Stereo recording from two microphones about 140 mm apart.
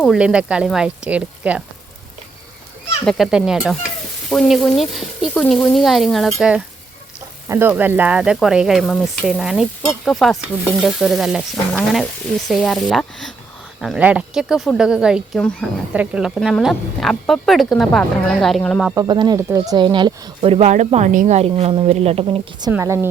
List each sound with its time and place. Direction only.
0.1 s speech: 5° right (ahead or behind)
3.1 s a woman's voice: centre (ahead or behind)
7.4 s a woman's voice: 20° right (ahead or behind); by 18.9 s centre (ahead or behind)
18.9 s speech: 30° right (ahead or behind)
19.4 s speech: 20° right (ahead or behind)
19.7 s speech: 35° right (ahead or behind)
20.4 s speech: 50° right (ahead or behind)
22.7 s speech: 20° right (ahead or behind)